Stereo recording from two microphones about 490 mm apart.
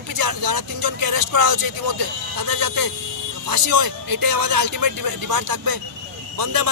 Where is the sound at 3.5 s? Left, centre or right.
Right.